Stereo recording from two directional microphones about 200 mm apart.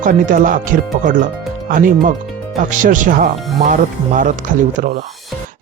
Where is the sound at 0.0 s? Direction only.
40° right (ahead or behind).